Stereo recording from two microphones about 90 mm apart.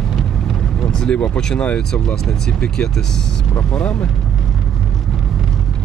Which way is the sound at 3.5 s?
15° left (ahead or behind).